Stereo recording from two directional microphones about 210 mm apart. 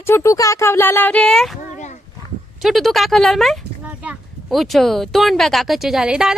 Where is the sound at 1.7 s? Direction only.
35° left (ahead or behind).